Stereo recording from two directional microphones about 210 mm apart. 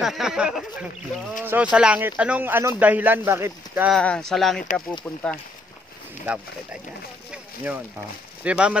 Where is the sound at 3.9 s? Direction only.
5° left (ahead or behind).